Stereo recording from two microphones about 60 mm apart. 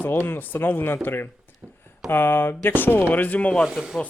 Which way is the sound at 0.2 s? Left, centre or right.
Left.